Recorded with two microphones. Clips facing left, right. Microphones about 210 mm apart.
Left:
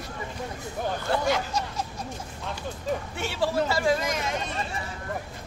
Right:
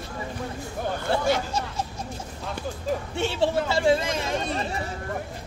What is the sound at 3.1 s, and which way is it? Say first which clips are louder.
Speech: right 3 dB; 25° right (ahead or behind).